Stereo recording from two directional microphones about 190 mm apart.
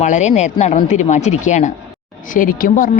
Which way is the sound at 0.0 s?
40° left (ahead or behind).